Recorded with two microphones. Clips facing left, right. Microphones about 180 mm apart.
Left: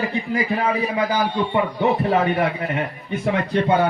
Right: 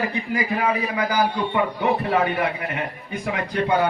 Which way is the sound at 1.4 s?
25° left (ahead or behind).